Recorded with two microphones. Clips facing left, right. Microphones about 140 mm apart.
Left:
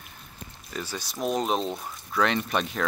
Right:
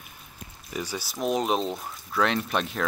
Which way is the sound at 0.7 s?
10° right (ahead or behind).